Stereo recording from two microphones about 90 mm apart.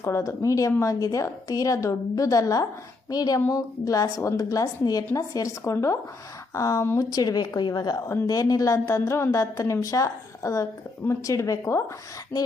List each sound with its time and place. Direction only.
0.0 s a woman's voice: 35° left (ahead or behind)